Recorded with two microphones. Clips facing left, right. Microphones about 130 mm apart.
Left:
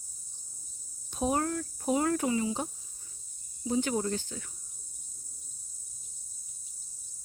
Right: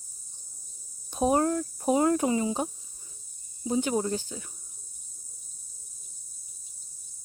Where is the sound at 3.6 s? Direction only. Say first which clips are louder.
Right 2 dB; 20° right (ahead or behind).